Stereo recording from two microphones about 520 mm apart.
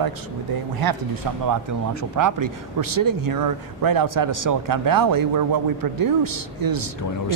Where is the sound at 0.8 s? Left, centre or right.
Right.